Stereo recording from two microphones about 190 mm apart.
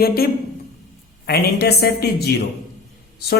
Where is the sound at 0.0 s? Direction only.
55° left (ahead or behind).